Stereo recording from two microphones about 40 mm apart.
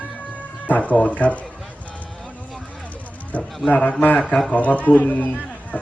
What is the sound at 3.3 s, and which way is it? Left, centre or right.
Speech, left.